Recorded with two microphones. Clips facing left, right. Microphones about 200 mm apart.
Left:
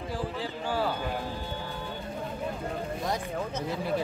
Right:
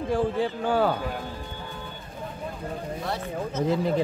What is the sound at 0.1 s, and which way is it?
Speech, 55° right (ahead or behind).